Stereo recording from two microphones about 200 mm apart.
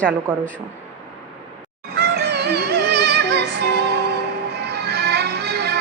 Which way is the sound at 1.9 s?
55° right (ahead or behind).